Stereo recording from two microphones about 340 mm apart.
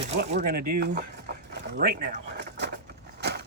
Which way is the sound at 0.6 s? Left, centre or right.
Right.